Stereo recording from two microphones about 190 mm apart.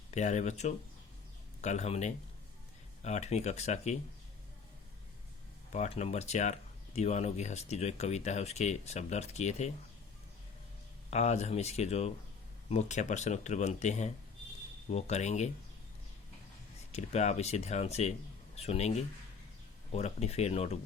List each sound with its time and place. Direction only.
0.1 s speech: 35° left (ahead or behind)
5.7 s speech: 35° left (ahead or behind)
11.1 s speech: 35° left (ahead or behind)
16.9 s speech: 35° left (ahead or behind)